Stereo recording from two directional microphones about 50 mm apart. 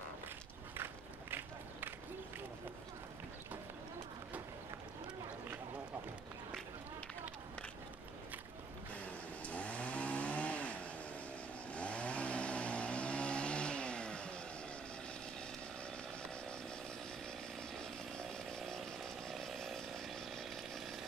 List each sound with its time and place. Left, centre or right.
1.3 s battle cry: right
9.0 s chainsaw: left
11.7 s vehicle: left
18.7 s chainsaw: centre